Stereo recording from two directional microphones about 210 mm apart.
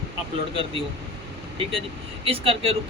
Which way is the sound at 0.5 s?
25° right (ahead or behind).